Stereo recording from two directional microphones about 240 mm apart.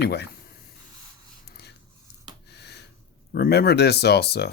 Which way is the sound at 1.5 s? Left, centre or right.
Left.